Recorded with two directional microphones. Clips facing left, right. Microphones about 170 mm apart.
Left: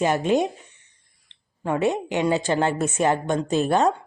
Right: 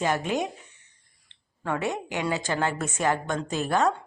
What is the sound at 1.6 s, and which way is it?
A woman's voice, 20° left (ahead or behind).